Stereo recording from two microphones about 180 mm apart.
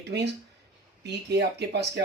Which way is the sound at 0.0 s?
70° right (ahead or behind).